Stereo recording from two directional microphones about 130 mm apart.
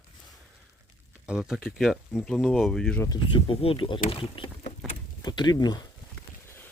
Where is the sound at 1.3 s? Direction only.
5° right (ahead or behind).